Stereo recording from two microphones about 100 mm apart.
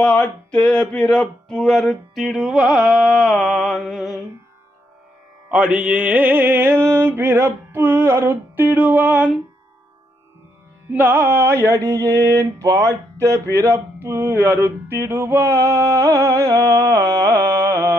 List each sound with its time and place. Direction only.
0.0 s a sound: 15° left (ahead or behind)
5.5 s mantra: 10° right (ahead or behind)
10.9 s mantra: 20° right (ahead or behind)